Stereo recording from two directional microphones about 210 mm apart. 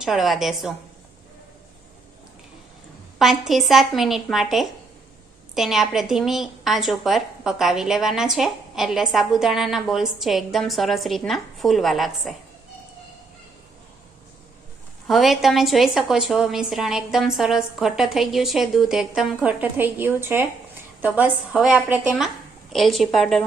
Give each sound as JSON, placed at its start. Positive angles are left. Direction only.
{"t": 0.0, "sound": "a woman's voice", "side_deg": 0}
{"t": 3.2, "sound": "a woman's voice", "side_deg": 0}
{"t": 15.0, "sound": "a woman's voice", "side_deg": 0}